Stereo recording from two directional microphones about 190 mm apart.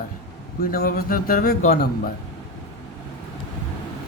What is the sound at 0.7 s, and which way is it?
A man's voice, 50° left (ahead or behind).